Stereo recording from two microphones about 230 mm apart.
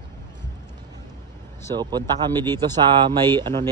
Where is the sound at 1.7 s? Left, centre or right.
Centre.